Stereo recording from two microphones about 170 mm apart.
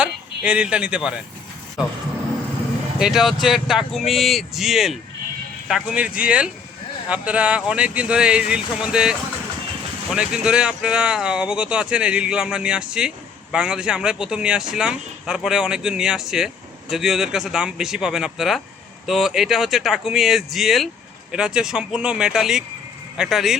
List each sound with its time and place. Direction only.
0.0 s speech: 5° right (ahead or behind)
3.0 s speech: centre (ahead or behind)